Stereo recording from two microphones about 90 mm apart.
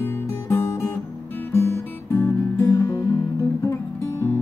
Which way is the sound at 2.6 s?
40° left (ahead or behind).